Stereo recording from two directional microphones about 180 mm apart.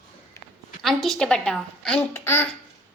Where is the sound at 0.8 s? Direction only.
Centre (ahead or behind).